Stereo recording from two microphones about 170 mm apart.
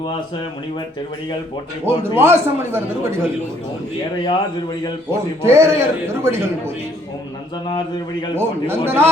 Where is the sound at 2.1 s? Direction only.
15° right (ahead or behind).